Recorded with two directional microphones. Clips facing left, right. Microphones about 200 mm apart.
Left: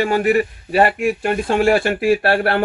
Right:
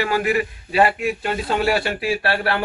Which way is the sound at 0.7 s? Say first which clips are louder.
Left 3 dB; 50° left (ahead or behind).